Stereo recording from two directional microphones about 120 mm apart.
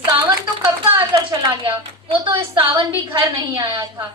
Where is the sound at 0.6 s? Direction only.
35° right (ahead or behind).